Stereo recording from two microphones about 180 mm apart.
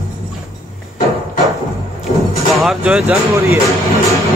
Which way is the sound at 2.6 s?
5° right (ahead or behind).